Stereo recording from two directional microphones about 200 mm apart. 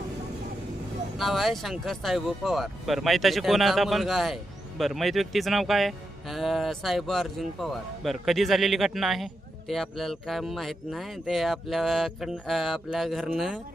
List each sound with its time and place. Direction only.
1.2 s speech: centre (ahead or behind)